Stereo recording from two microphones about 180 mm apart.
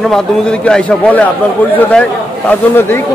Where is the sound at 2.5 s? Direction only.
10° left (ahead or behind).